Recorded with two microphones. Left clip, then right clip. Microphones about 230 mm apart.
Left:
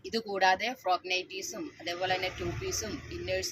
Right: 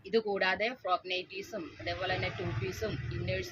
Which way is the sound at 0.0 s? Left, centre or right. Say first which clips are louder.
Left 2 dB; centre.